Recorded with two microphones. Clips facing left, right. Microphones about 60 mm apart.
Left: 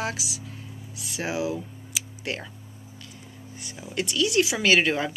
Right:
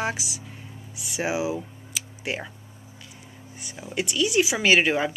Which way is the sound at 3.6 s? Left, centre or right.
Centre.